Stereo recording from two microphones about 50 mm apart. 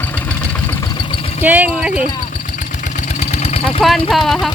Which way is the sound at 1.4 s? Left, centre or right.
Right.